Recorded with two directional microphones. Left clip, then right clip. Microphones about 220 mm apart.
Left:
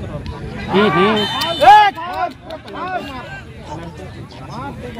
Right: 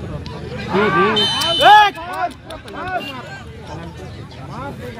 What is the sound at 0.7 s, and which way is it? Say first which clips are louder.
Speech: left 1 dB; 50° left (ahead or behind).